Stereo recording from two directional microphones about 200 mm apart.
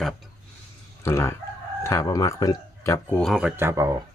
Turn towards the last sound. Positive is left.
turn(degrees=-15)  # may be behind; listen again after turning